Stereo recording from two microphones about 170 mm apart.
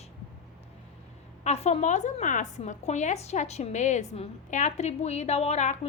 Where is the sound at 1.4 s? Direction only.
40° left (ahead or behind).